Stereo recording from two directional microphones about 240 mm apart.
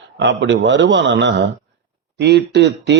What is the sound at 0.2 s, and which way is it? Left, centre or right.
Speech, right.